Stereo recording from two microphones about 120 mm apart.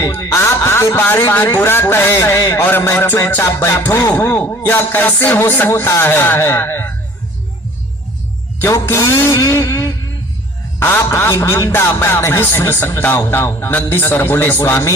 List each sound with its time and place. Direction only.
0.0 s music: 25° left (ahead or behind)
8.6 s music: 20° left (ahead or behind)